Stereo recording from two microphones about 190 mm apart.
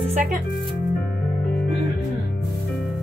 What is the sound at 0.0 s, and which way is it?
Speech, 35° right (ahead or behind).